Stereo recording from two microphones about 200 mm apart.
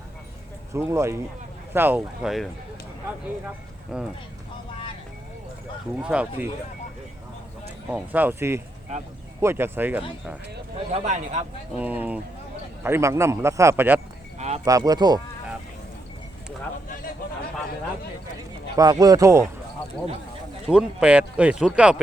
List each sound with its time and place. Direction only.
0.7 s speech: 15° right (ahead or behind)
3.9 s speech: 5° right (ahead or behind)
6.0 s speech: 5° right (ahead or behind)
7.9 s speech: 5° right (ahead or behind)
10.9 s a man's voice: 35° right (ahead or behind)
11.8 s speech: 10° right (ahead or behind)
14.3 s a sound: 35° right (ahead or behind)
14.6 s speech: 20° right (ahead or behind)
18.8 s speech: 20° right (ahead or behind)
20.7 s speech: 5° right (ahead or behind)